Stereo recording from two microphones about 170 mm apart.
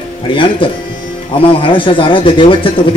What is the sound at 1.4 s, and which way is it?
Speech, 30° left (ahead or behind).